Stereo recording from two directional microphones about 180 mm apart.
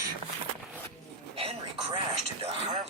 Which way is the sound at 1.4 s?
30° right (ahead or behind).